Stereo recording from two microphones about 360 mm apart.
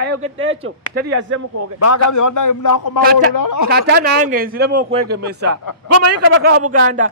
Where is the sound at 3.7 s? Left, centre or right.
Right.